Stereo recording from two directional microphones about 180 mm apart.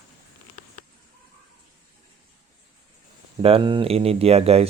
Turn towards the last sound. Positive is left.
turn(degrees=-35)  # may be behind; listen again after turning